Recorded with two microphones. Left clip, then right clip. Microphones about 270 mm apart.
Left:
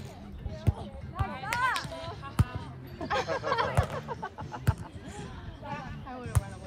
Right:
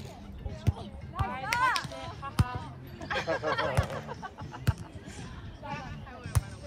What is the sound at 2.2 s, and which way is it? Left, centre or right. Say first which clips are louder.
Music: right 6 dB; right.